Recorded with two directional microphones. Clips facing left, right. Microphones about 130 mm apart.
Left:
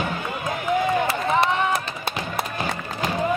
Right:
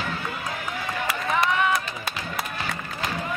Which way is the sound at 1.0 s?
30° left (ahead or behind).